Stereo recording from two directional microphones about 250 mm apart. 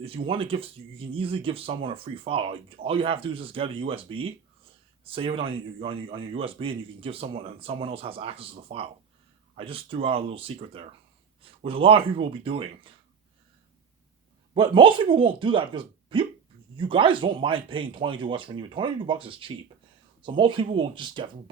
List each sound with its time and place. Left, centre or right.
0.0 s speech: right
14.5 s speech: centre